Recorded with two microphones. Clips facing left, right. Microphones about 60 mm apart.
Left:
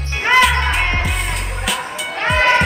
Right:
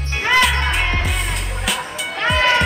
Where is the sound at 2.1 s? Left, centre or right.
Left.